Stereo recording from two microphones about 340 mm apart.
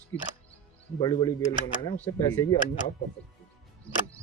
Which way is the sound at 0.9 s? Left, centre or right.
Centre.